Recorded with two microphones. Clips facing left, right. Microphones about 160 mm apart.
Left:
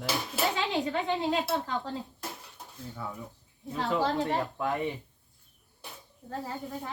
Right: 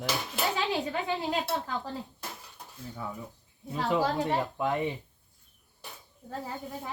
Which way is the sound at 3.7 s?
15° right (ahead or behind).